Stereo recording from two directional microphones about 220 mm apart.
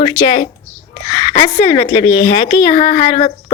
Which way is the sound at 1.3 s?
15° left (ahead or behind).